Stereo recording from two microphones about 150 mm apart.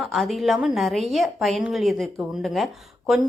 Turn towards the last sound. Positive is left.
turn(degrees=0)  # may be behind; listen again after turning